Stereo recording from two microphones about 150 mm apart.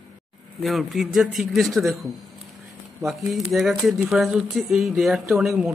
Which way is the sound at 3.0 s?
Centre (ahead or behind).